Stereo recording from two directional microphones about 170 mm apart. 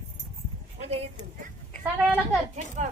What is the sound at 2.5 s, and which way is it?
Speech, 45° right (ahead or behind).